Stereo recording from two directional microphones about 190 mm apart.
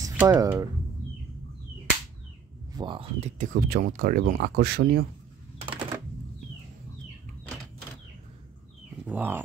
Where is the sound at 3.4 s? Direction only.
45° right (ahead or behind).